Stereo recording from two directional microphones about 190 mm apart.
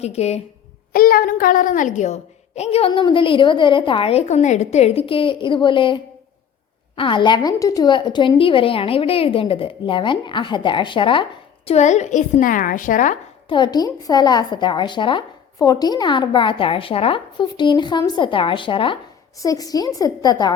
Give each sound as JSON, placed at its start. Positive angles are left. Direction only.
{"t": 0.0, "sound": "speech", "side_deg": 35}
{"t": 0.9, "sound": "a woman's voice", "side_deg": 50}
{"t": 13.5, "sound": "a woman's voice", "side_deg": 20}